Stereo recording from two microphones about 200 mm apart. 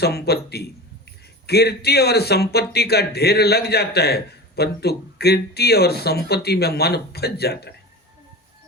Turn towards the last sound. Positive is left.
turn(degrees=55)  # may be behind; listen again after turning